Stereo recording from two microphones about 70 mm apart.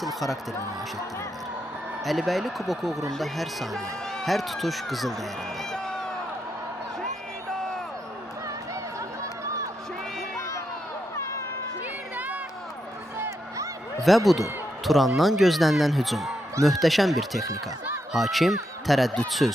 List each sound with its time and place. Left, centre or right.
0.0 s speech: centre
2.0 s speech: centre
5.7 s music: centre
9.0 s a sound: right
10.3 s crowd: left
12.1 s a sound: right
14.1 s a man's voice: centre